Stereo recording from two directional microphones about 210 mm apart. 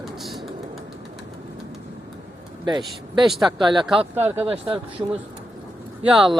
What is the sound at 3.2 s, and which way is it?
Speech, centre (ahead or behind).